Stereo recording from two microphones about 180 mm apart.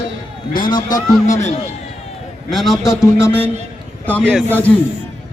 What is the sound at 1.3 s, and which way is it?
Speech, 40° left (ahead or behind).